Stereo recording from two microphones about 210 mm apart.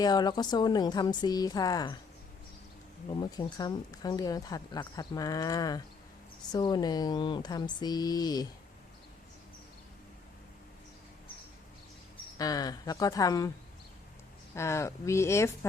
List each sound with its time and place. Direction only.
0.0 s speech: 20° left (ahead or behind)
3.1 s speech: 20° left (ahead or behind)
12.1 s speech: 15° left (ahead or behind)
14.5 s speech: 15° left (ahead or behind)